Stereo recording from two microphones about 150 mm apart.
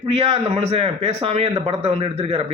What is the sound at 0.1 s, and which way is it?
A man's voice, 40° right (ahead or behind).